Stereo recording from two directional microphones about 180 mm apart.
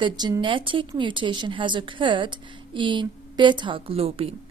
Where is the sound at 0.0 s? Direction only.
25° right (ahead or behind).